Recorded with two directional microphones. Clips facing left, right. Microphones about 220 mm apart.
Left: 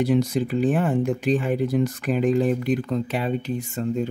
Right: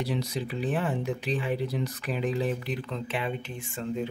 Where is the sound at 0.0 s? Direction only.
50° left (ahead or behind).